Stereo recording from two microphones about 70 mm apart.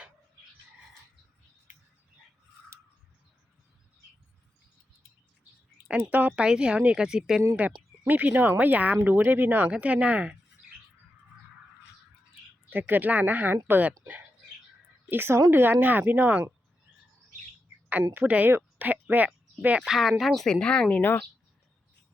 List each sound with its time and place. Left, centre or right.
6.1 s speech: right
8.0 s speech: right
9.6 s speech: centre
12.7 s speech: right
15.1 s a woman's voice: right
18.2 s speech: centre
19.8 s speech: centre
20.5 s speech: centre